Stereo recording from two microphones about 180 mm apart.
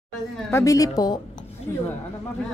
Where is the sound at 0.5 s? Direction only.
15° left (ahead or behind).